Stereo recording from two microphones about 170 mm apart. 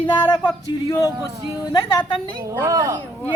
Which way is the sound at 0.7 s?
20° left (ahead or behind).